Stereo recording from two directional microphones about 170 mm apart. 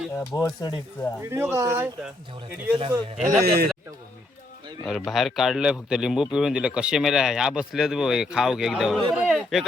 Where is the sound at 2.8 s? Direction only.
30° right (ahead or behind).